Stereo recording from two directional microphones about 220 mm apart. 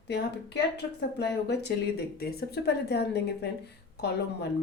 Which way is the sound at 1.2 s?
50° left (ahead or behind).